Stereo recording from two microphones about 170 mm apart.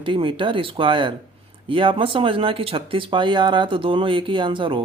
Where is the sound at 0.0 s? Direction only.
30° right (ahead or behind).